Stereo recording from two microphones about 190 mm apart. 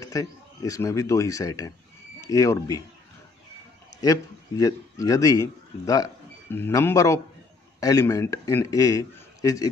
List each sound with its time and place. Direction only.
0.0 s speech: 20° left (ahead or behind)
4.0 s speech: 20° left (ahead or behind)